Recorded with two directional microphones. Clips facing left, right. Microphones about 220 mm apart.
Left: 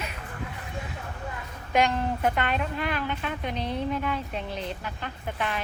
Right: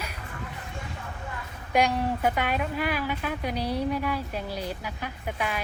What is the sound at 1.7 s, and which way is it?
Speech, centre (ahead or behind).